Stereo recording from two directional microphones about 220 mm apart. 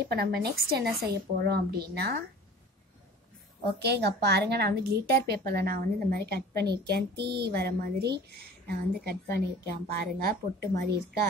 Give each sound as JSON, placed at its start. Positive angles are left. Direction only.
{"t": 0.0, "sound": "a woman's voice", "side_deg": -45}
{"t": 3.8, "sound": "a woman's voice", "side_deg": -50}